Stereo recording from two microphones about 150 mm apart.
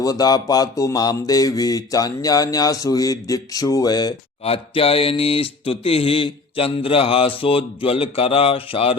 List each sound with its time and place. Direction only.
0.0 s speech: 25° left (ahead or behind)
4.4 s mantra: 40° left (ahead or behind)